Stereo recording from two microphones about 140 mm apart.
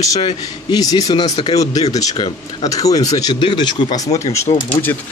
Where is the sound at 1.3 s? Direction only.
45° left (ahead or behind).